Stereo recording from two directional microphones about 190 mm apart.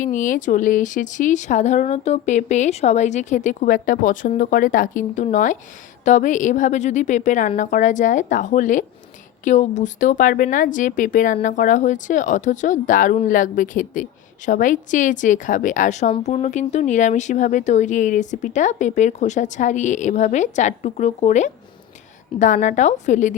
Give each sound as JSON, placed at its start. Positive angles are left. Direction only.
{"t": 0.0, "sound": "speech", "side_deg": 40}